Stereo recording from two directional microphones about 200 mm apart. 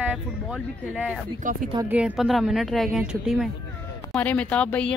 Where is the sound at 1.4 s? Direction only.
40° right (ahead or behind).